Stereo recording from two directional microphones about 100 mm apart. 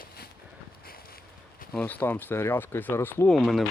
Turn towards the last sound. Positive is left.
turn(degrees=0)  # may be behind; listen again after turning